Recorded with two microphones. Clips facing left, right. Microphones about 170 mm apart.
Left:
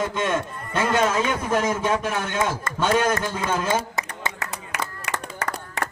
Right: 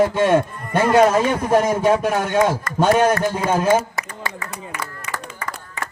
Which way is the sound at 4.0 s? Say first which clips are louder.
Even; 20° left (ahead or behind).